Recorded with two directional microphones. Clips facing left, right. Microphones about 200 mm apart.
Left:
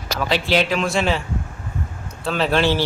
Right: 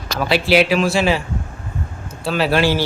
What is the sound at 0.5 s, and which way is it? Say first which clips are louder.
Speech: right 5 dB; 10° right (ahead or behind).